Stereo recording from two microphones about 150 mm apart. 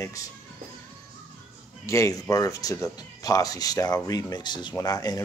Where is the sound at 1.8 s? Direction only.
20° left (ahead or behind).